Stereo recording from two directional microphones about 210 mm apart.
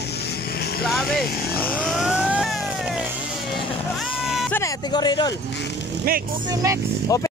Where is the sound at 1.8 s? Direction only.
5° right (ahead or behind).